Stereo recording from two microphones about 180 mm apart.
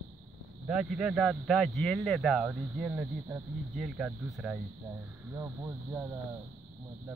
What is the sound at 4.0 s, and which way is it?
Speech, 5° right (ahead or behind).